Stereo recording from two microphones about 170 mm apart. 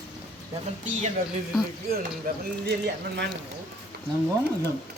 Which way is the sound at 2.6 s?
75° right (ahead or behind).